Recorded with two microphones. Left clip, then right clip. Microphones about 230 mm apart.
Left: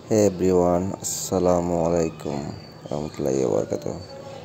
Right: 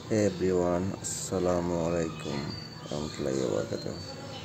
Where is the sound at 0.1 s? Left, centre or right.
Centre.